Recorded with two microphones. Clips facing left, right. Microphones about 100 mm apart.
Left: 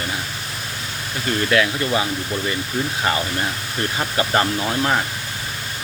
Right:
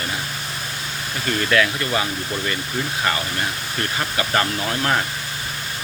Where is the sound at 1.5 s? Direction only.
15° left (ahead or behind).